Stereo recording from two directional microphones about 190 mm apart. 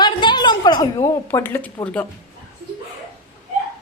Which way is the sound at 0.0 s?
25° left (ahead or behind).